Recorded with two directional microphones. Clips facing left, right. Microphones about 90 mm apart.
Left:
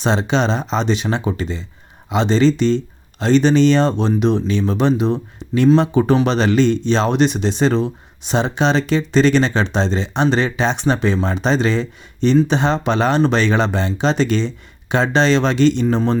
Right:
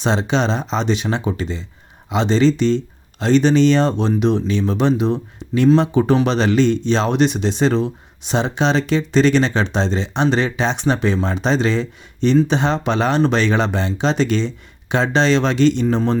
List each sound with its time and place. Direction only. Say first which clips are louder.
0.0 s speech: left 1 dB; 45° left (ahead or behind)